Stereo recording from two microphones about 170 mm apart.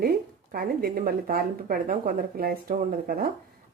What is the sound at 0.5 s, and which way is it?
A woman's voice, 60° right (ahead or behind).